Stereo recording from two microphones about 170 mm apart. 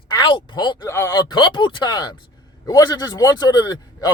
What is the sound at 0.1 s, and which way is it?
A man's voice, 25° left (ahead or behind).